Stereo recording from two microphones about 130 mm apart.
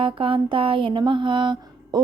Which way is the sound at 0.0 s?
45° right (ahead or behind).